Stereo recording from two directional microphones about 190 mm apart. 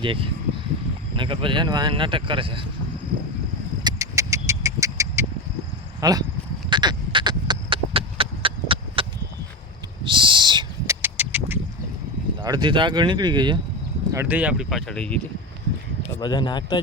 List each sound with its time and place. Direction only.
0.0 s speech: 25° right (ahead or behind)
3.8 s a sound: 15° right (ahead or behind)
6.0 s speech: 20° right (ahead or behind)
6.7 s a sound: 25° right (ahead or behind)
10.0 s owl: 25° right (ahead or behind)
11.0 s a sound: 10° right (ahead or behind)
12.4 s speech: 25° right (ahead or behind)
14.1 s speech: 10° right (ahead or behind); by 15.2 s 5° left (ahead or behind)
16.2 s speech: 25° left (ahead or behind)